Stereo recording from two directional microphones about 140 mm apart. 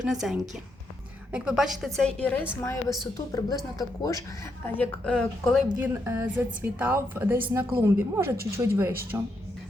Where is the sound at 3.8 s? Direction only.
25° left (ahead or behind).